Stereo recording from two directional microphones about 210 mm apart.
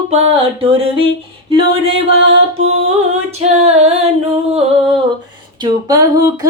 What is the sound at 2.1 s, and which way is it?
Music, 30° right (ahead or behind).